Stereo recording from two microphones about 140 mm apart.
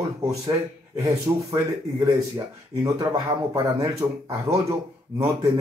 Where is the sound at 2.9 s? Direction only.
30° right (ahead or behind).